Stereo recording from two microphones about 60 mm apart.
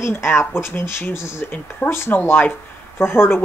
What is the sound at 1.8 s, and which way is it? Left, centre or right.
Speech, left.